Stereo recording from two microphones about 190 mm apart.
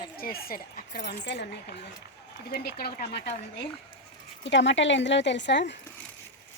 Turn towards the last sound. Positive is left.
turn(degrees=65)  # may be behind; listen again after turning